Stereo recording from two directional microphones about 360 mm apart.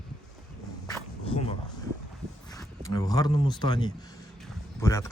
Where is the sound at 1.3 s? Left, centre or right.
Centre.